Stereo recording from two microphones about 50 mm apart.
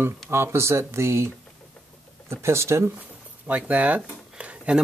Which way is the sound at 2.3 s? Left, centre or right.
Right.